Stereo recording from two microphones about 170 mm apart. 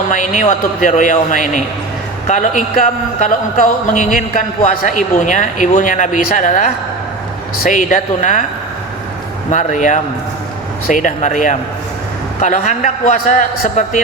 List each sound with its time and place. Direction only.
0.1 s a man's voice: 50° left (ahead or behind)
9.5 s a man's voice: 45° left (ahead or behind)